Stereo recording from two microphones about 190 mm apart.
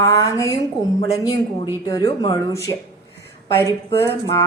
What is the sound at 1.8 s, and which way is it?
Speech, 20° left (ahead or behind).